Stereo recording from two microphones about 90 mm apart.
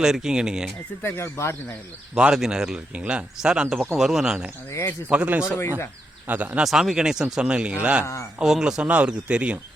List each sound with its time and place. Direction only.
0.0 s speech: 5° right (ahead or behind)
1.0 s speech: 30° left (ahead or behind)
2.1 s speech: 10° right (ahead or behind)
4.7 s speech: 30° left (ahead or behind)
5.1 s speech: 15° right (ahead or behind)
6.6 s speech: 5° right (ahead or behind)